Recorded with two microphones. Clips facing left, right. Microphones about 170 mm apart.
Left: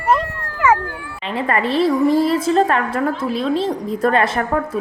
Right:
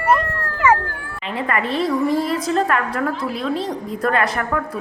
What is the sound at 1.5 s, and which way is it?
A woman's voice, 30° left (ahead or behind).